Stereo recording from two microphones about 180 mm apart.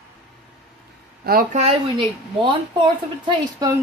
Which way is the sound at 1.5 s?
30° right (ahead or behind).